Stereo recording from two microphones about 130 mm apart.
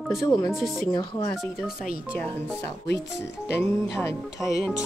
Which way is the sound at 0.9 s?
35° left (ahead or behind).